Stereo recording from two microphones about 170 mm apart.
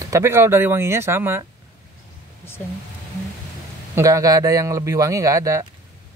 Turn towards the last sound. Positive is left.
turn(degrees=-20)  # may be behind; listen again after turning